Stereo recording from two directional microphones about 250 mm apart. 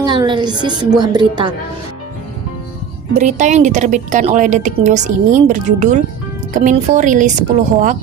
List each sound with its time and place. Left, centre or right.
0.0 s a woman's voice: centre
3.2 s a woman's voice: right